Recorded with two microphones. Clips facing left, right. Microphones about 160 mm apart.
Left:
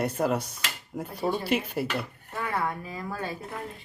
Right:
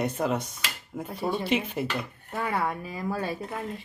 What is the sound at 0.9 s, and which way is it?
Speech, 5° right (ahead or behind).